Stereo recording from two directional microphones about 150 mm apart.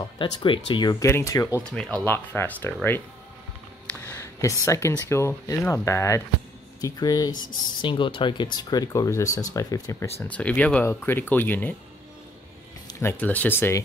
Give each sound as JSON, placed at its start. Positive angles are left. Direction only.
{"t": 0.2, "sound": "speech", "side_deg": 35}
{"t": 1.6, "sound": "speech", "side_deg": 5}
{"t": 4.0, "sound": "a sound", "side_deg": 15}
{"t": 5.0, "sound": "speech", "side_deg": 20}
{"t": 10.2, "sound": "speech", "side_deg": 10}
{"t": 13.2, "sound": "speech", "side_deg": 10}